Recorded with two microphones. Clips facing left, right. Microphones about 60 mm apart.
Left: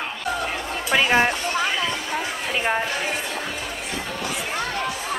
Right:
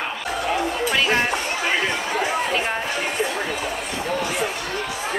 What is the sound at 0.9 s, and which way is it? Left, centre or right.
Music, centre.